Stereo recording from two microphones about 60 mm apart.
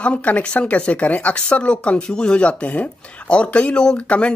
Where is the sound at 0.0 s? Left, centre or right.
Left.